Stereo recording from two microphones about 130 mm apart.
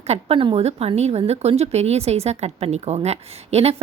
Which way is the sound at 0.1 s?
45° right (ahead or behind).